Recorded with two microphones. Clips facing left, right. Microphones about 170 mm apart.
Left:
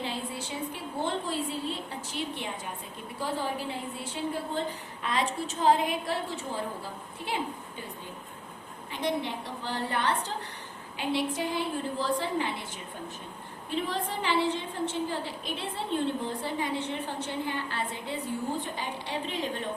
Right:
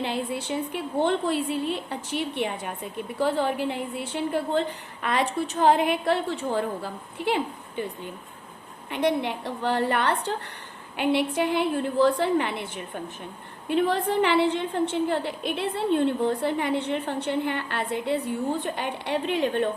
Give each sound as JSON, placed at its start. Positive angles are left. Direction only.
{"t": 0.0, "sound": "a woman's voice", "side_deg": -65}
{"t": 8.9, "sound": "a woman's voice", "side_deg": -65}